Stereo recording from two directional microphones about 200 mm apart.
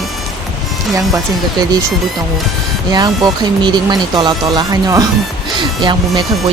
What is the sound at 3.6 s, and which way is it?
Speech, 20° right (ahead or behind).